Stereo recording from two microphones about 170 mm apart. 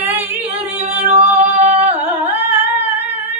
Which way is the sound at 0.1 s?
10° right (ahead or behind).